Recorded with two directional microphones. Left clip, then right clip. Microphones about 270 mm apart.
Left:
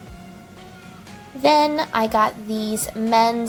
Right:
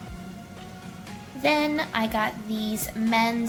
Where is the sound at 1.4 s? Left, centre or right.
Left.